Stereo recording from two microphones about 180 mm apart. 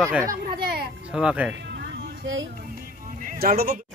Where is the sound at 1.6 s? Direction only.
70° right (ahead or behind).